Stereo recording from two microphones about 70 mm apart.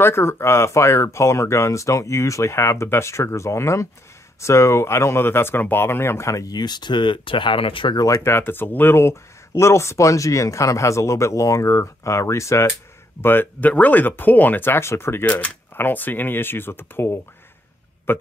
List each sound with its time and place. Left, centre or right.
0.0 s speech: left
6.5 s speech: left
7.9 s speech: left
8.2 s speech: left
13.2 s speech: left
15.2 s speech: left